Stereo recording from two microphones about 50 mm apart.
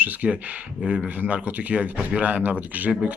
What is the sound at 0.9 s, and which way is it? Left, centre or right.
Speech, right.